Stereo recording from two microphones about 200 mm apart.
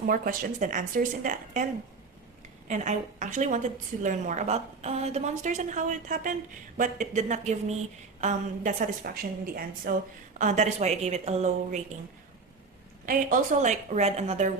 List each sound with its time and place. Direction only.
0.1 s a woman's voice: 45° right (ahead or behind)
2.6 s a woman's voice: 35° right (ahead or behind)
13.1 s a woman's voice: 40° right (ahead or behind)